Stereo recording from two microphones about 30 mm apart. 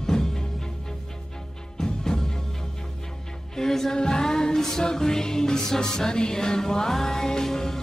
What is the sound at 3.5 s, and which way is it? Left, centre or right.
Music, centre.